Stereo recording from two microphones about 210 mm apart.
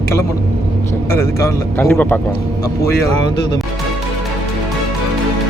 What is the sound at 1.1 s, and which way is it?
Speech, 15° left (ahead or behind).